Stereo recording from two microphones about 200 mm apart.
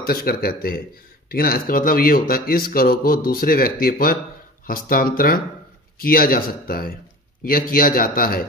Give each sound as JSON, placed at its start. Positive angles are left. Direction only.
{"t": 0.0, "sound": "speech", "side_deg": 50}